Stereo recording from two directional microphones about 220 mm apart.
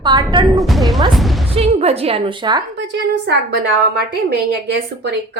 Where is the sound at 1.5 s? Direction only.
30° right (ahead or behind).